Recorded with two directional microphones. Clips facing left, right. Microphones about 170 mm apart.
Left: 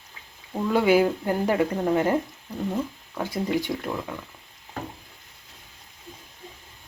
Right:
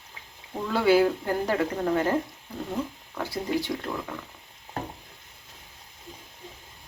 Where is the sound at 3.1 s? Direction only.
15° left (ahead or behind).